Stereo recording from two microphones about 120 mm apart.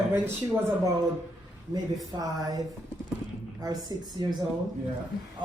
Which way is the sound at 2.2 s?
30° right (ahead or behind).